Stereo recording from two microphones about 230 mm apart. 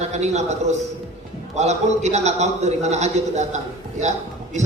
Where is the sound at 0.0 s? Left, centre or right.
Right.